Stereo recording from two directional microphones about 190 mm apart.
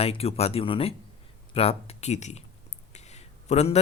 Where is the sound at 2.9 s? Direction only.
35° left (ahead or behind).